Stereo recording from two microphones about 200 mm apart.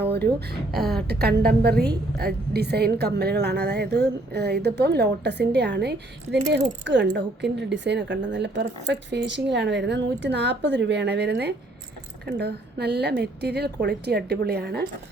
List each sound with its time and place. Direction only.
0.1 s a woman's voice: 55° right (ahead or behind)